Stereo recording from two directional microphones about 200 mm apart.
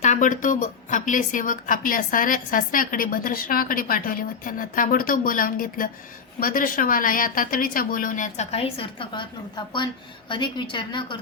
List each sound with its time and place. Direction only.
0.0 s a woman's voice: 40° left (ahead or behind)